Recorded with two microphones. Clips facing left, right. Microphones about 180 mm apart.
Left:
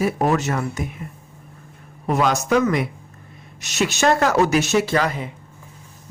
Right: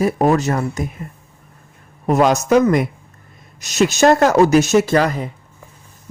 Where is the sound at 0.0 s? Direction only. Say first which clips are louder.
Right 4 dB; 40° right (ahead or behind).